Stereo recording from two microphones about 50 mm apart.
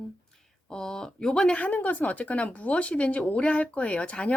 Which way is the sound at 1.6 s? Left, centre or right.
Left.